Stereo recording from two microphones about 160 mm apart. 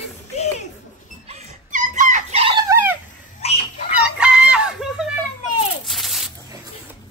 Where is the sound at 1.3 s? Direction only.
45° right (ahead or behind).